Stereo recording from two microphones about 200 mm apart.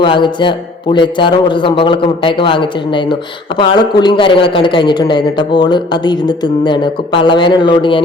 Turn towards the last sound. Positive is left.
turn(degrees=25)  # may be behind; listen again after turning